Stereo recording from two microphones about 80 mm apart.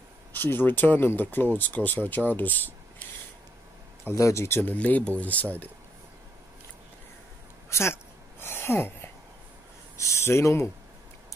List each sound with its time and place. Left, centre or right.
0.3 s speech: left
4.1 s speech: left
7.7 s a sound: left
9.9 s speech: left